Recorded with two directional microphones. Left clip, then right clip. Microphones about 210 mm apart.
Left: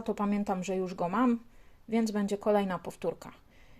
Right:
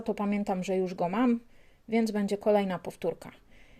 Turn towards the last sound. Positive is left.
turn(degrees=-15)  # may be behind; listen again after turning